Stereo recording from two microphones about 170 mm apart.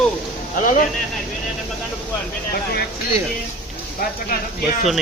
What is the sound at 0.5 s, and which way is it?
Speech, 50° left (ahead or behind).